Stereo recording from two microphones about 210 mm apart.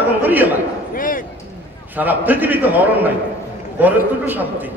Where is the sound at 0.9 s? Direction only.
40° left (ahead or behind).